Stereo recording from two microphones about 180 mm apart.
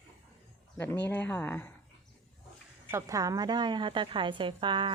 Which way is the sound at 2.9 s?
15° right (ahead or behind).